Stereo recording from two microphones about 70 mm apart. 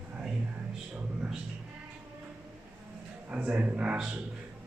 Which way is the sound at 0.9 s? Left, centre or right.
Centre.